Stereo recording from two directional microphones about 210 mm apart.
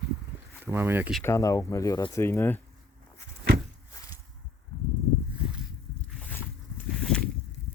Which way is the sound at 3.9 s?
15° left (ahead or behind).